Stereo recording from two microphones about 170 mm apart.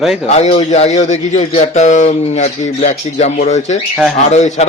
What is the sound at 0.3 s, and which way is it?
Speech, 40° left (ahead or behind).